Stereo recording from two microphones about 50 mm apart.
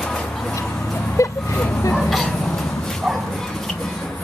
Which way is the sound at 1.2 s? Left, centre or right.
Left.